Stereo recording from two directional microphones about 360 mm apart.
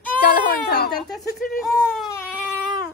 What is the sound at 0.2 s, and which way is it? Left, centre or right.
Baby cry, left.